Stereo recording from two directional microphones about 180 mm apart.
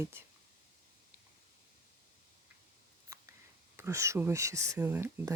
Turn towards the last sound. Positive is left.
turn(degrees=-15)  # may be behind; listen again after turning